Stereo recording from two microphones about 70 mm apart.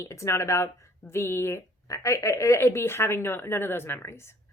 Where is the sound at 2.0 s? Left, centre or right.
Left.